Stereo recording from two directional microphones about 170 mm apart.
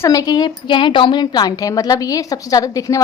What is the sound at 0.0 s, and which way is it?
A woman's voice, 20° left (ahead or behind).